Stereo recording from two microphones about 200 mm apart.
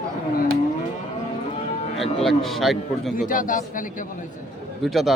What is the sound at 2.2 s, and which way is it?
Speech, centre (ahead or behind).